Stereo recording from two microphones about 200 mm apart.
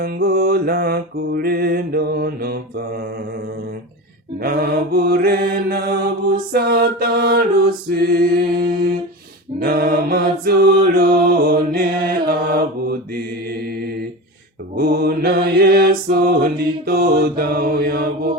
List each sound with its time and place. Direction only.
0.0 s mantra: 50° right (ahead or behind)
4.4 s mantra: 50° right (ahead or behind)
9.6 s mantra: 50° right (ahead or behind)
14.8 s mantra: 50° right (ahead or behind)